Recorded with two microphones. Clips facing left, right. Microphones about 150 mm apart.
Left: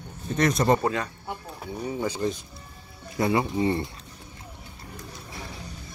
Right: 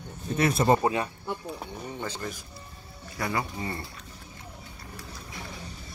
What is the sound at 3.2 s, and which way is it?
Speech, 25° left (ahead or behind).